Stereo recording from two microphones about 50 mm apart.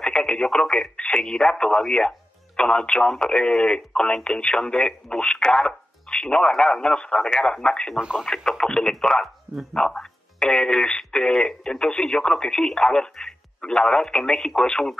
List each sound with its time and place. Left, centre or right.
0.0 s speech: centre
8.0 s speech: centre
8.3 s speech: centre